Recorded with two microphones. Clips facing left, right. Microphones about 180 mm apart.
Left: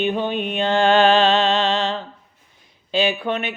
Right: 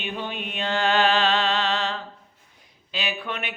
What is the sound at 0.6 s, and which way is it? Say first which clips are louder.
Music: left 6 dB; 25° left (ahead or behind).